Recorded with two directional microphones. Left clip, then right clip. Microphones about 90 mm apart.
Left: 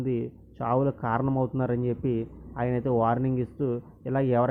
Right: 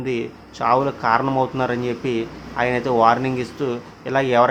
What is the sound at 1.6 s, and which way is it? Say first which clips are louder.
Speech: right 7 dB; 35° left (ahead or behind).